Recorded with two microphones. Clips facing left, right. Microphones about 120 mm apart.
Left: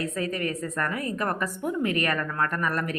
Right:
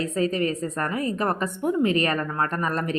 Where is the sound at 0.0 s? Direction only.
25° right (ahead or behind).